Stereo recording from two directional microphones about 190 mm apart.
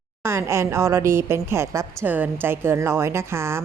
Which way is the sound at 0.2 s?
15° right (ahead or behind).